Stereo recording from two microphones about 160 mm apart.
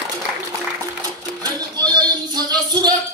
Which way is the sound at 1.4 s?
25° right (ahead or behind).